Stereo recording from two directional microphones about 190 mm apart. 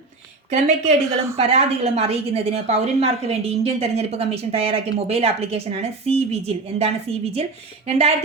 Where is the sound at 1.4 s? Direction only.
30° right (ahead or behind).